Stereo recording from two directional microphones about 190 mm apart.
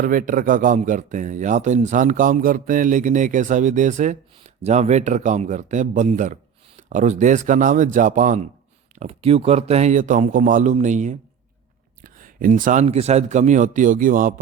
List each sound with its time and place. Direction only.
0.0 s speech: 45° right (ahead or behind)